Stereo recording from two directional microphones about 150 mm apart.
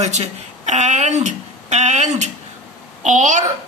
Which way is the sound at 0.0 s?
50° right (ahead or behind).